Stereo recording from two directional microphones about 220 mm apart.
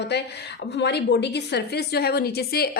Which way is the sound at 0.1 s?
50° left (ahead or behind).